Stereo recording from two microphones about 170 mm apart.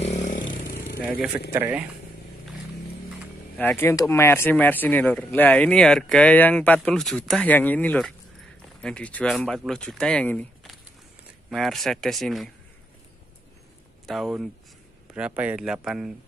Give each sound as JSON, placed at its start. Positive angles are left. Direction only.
{"t": 0.0, "sound": "vehicle", "side_deg": 45}
{"t": 0.7, "sound": "vehicle", "side_deg": 80}
{"t": 1.0, "sound": "speech", "side_deg": -5}
{"t": 3.5, "sound": "speech", "side_deg": 10}
{"t": 14.0, "sound": "speech", "side_deg": 0}